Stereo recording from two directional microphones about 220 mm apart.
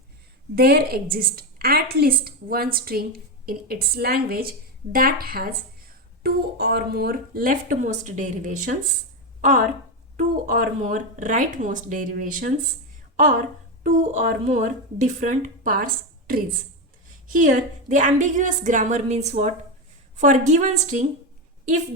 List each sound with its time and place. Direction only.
0.5 s a woman's voice: 45° right (ahead or behind)
13.8 s a woman's voice: 35° right (ahead or behind)